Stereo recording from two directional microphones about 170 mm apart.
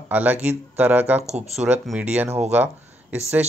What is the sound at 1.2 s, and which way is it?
Speech, 40° right (ahead or behind).